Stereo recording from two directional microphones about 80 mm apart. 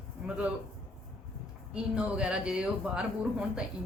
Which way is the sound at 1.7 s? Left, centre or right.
Centre.